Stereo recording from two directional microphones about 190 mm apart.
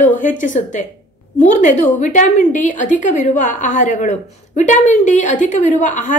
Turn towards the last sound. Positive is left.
turn(degrees=40)  # may be behind; listen again after turning